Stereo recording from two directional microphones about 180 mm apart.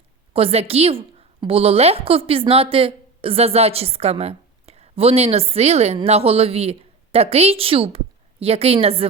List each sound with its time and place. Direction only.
0.3 s a woman's voice: 35° right (ahead or behind)